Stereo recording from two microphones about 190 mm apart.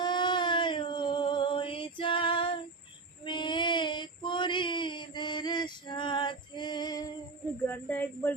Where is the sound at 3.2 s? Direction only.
25° left (ahead or behind).